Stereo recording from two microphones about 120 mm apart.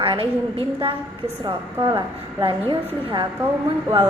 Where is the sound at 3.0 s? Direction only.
45° right (ahead or behind).